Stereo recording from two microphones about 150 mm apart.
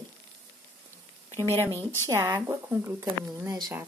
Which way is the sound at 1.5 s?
15° left (ahead or behind).